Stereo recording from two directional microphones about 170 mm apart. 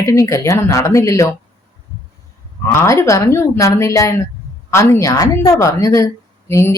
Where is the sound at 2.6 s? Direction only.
15° left (ahead or behind).